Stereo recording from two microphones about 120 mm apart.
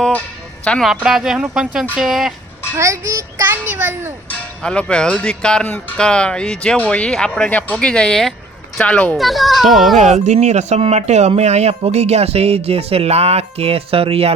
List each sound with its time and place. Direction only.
0.6 s speech: 10° left (ahead or behind)
1.0 s speech: 5° right (ahead or behind)
2.7 s a child's voice: 25° right (ahead or behind)
4.3 s speech: 10° left (ahead or behind)
9.1 s speech: centre (ahead or behind)
10.0 s speech: 70° right (ahead or behind); by 14.3 s 55° right (ahead or behind)